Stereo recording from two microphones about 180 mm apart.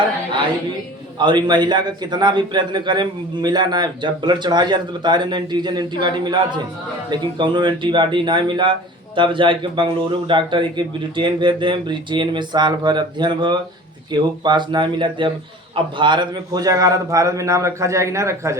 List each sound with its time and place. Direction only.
1.2 s a man's voice: 25° right (ahead or behind)